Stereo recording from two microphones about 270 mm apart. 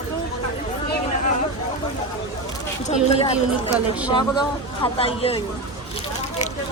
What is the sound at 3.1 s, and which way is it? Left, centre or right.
A man's voice, left.